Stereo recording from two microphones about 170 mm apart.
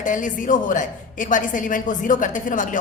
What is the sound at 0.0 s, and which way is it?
A woman's voice, 50° left (ahead or behind).